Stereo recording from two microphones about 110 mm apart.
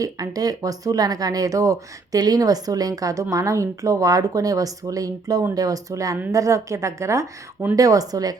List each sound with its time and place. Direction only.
0.0 s a woman's voice: 35° right (ahead or behind)